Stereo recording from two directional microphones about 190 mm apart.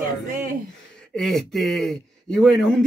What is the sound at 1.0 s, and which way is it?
Speech, 5° left (ahead or behind).